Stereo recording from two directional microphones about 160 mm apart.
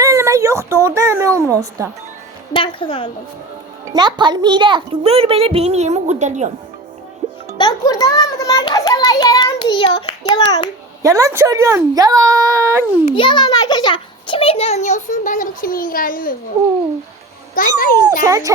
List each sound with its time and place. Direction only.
0.0 s a sound: 15° right (ahead or behind)
2.5 s a woman's voice: 30° left (ahead or behind)
3.9 s a child's voice: 30° right (ahead or behind); by 6.5 s 45° right (ahead or behind)
7.2 s music: 45° right (ahead or behind)
7.6 s a child's voice: 25° left (ahead or behind)
11.0 s a woman's voice: 20° right (ahead or behind)
13.1 s a child's voice: 30° left (ahead or behind); by 16.3 s 60° left (ahead or behind)
17.5 s speech: 60° left (ahead or behind)
18.2 s a woman's voice: 20° right (ahead or behind)